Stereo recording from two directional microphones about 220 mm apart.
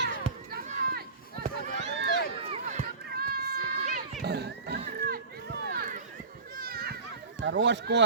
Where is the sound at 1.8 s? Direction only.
55° right (ahead or behind).